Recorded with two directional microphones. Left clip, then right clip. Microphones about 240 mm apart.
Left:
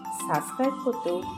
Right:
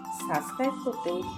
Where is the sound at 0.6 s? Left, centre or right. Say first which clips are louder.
Left 3 dB; centre.